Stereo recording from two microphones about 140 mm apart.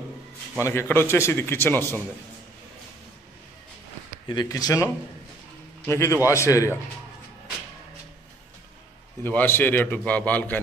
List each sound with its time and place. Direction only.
0.7 s a man's voice: 15° left (ahead or behind)
4.3 s speech: 30° left (ahead or behind)
9.2 s a man's voice: 15° left (ahead or behind)